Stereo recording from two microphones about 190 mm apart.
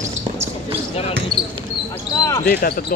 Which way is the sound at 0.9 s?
30° left (ahead or behind).